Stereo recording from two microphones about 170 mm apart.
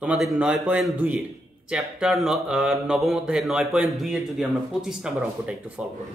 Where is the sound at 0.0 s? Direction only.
5° right (ahead or behind).